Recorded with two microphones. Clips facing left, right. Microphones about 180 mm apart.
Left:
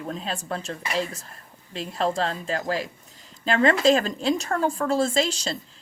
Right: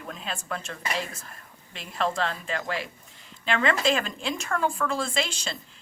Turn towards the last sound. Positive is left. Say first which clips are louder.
# left 6 dB
turn(degrees=40)  # may be behind; listen again after turning